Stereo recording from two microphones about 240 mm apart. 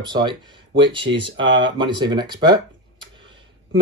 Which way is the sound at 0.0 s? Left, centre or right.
Centre.